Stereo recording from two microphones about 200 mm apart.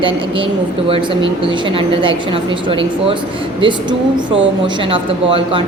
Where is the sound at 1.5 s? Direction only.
25° right (ahead or behind).